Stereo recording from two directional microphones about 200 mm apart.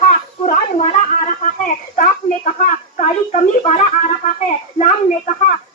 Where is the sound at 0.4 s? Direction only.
35° left (ahead or behind).